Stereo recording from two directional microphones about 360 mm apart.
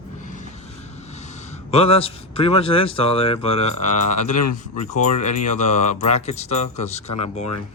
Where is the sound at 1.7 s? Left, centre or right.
Centre.